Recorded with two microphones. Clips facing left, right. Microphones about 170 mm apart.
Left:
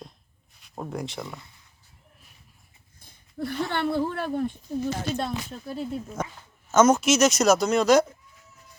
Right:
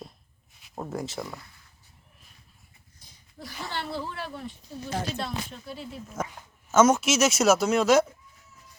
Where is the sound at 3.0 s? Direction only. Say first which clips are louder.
Left 12 dB; 55° left (ahead or behind).